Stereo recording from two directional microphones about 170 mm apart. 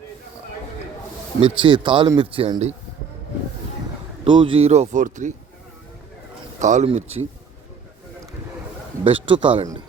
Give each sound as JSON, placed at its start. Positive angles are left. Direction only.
{"t": 1.4, "sound": "speech", "side_deg": -30}
{"t": 4.2, "sound": "speech", "side_deg": -30}
{"t": 6.6, "sound": "speech", "side_deg": -45}
{"t": 9.0, "sound": "speech", "side_deg": -30}